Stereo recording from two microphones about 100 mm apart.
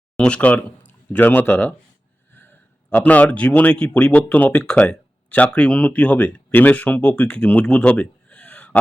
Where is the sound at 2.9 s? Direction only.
15° left (ahead or behind).